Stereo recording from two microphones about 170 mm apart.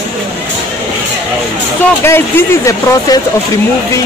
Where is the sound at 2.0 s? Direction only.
15° left (ahead or behind).